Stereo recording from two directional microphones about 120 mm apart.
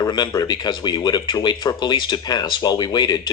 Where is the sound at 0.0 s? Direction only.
35° left (ahead or behind).